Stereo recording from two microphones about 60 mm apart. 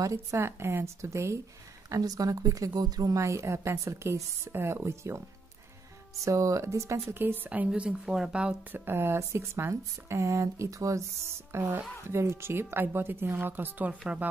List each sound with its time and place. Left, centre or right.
0.0 s a woman's voice: right
0.4 s speech: right
1.9 s a woman's voice: right
6.2 s a woman's voice: right
7.2 s speech: right; by 8.5 s centre
8.7 s speech: right